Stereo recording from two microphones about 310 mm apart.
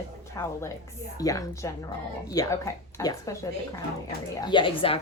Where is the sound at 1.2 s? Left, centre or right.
Centre.